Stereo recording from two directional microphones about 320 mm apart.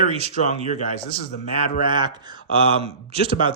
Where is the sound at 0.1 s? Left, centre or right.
Centre.